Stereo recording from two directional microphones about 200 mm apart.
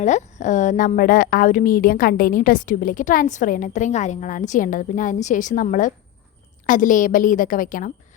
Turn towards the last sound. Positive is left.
turn(degrees=40)  # may be behind; listen again after turning